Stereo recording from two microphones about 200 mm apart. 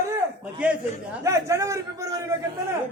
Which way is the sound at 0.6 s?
5° right (ahead or behind).